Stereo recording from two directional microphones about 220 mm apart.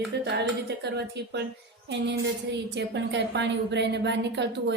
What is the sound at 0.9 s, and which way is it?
A woman's voice, 50° right (ahead or behind).